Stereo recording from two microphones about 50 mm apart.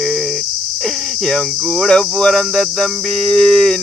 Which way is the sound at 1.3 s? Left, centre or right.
Centre.